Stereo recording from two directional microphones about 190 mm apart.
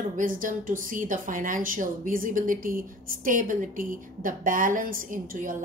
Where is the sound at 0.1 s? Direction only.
45° right (ahead or behind).